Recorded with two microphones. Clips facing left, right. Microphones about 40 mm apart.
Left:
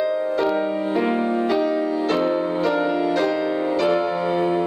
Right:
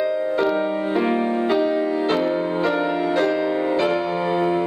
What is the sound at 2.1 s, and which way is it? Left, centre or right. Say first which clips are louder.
Music: even; centre.